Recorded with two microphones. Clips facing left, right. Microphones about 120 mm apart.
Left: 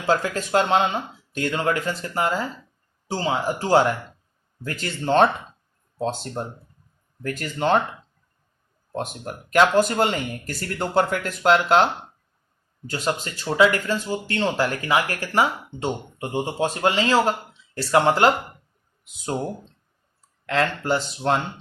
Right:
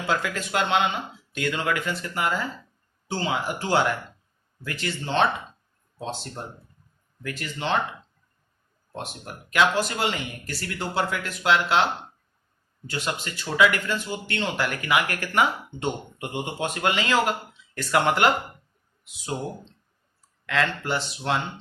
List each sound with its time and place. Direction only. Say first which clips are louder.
0.0 s speech: left 4 dB; 40° left (ahead or behind)
9.0 s speech: left 6 dB; 45° left (ahead or behind)
12.9 s speech: left 4 dB; 40° left (ahead or behind)
20.5 s speech: left 3 dB; 40° left (ahead or behind)